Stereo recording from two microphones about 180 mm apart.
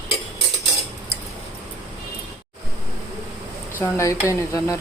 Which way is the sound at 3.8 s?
15° left (ahead or behind).